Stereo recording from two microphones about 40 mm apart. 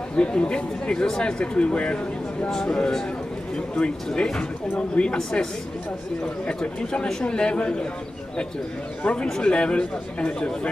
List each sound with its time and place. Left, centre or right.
0.1 s speech: left
2.5 s speech: centre
9.0 s speech: left